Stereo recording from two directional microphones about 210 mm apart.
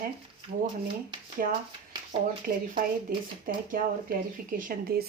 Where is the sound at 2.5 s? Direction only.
45° right (ahead or behind).